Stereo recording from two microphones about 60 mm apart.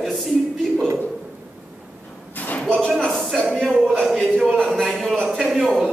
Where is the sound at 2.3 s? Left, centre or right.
Left.